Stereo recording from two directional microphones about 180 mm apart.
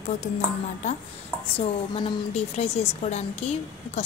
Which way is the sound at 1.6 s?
30° left (ahead or behind).